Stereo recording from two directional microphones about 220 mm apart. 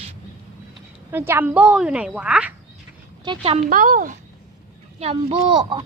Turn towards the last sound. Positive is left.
turn(degrees=-20)  # may be behind; listen again after turning